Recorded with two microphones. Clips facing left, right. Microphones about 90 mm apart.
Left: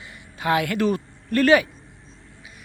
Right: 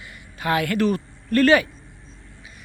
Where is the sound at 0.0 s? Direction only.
20° left (ahead or behind).